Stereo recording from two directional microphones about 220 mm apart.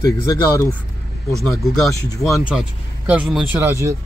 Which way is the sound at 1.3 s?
Centre (ahead or behind).